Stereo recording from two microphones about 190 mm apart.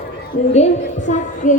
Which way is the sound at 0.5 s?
40° left (ahead or behind).